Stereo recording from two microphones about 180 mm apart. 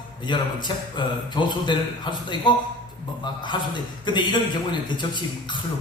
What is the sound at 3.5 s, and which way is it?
A man's voice, 25° left (ahead or behind).